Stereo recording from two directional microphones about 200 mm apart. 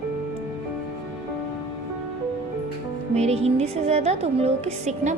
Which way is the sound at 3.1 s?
30° right (ahead or behind).